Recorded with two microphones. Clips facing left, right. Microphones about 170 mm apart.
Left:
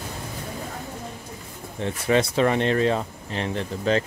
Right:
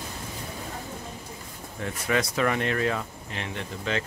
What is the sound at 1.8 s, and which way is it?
Speech, 30° left (ahead or behind).